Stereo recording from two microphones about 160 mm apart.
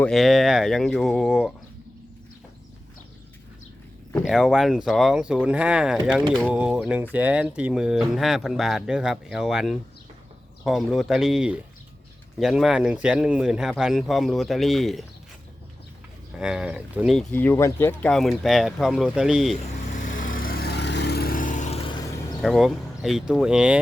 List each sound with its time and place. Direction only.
0.0 s speech: centre (ahead or behind)
4.2 s speech: 5° right (ahead or behind)
16.4 s speech: 5° right (ahead or behind)
17.2 s speech: 10° left (ahead or behind)
18.1 s speech: centre (ahead or behind)
19.9 s vehicle: 55° left (ahead or behind)
22.4 s speech: centre (ahead or behind)